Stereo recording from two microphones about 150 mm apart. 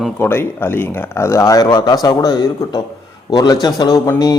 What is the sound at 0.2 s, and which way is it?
Speech, 15° left (ahead or behind).